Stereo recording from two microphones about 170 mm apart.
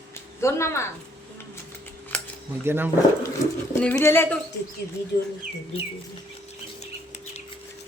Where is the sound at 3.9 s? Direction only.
15° left (ahead or behind).